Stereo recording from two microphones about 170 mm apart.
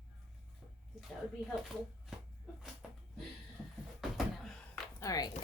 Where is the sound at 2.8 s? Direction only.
5° right (ahead or behind).